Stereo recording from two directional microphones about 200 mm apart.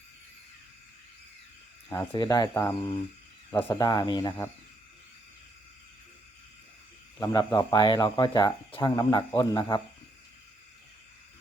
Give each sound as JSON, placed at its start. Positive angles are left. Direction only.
{"t": 2.1, "sound": "speech", "side_deg": 20}
{"t": 7.2, "sound": "speech", "side_deg": 20}